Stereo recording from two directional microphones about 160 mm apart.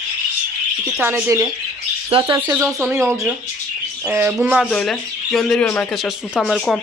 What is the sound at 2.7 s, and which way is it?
Speech, 15° right (ahead or behind).